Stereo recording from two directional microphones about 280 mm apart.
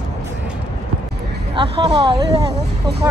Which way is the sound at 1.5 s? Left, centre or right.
Centre.